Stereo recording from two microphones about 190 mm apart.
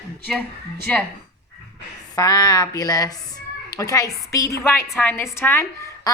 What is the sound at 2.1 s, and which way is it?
A woman's voice, 20° left (ahead or behind).